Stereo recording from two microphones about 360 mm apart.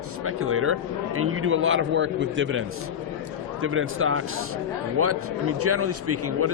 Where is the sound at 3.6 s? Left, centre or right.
Right.